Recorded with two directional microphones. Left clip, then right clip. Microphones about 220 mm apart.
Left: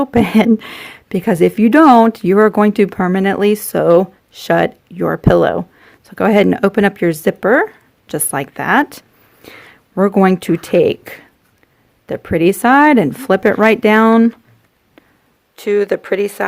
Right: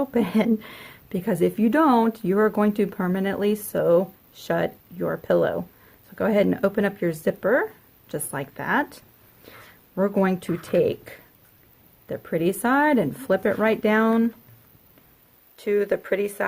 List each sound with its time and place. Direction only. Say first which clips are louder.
0.0 s speech: left 10 dB; 40° left (ahead or behind)
15.5 s speech: left 8 dB; 40° left (ahead or behind)